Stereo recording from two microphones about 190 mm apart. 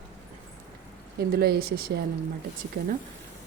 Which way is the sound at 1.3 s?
55° right (ahead or behind).